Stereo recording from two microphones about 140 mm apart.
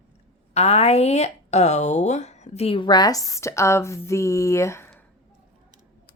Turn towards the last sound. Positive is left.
turn(degrees=20)  # may be behind; listen again after turning